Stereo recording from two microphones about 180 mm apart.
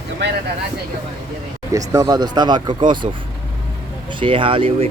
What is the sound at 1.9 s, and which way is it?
Speech, 20° right (ahead or behind).